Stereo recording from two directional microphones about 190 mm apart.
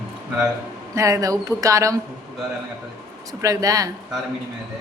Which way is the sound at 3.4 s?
15° right (ahead or behind).